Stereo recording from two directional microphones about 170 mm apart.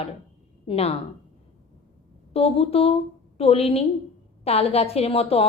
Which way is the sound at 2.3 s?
35° left (ahead or behind).